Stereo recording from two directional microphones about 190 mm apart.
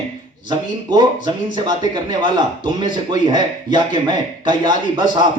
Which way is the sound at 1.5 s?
25° right (ahead or behind).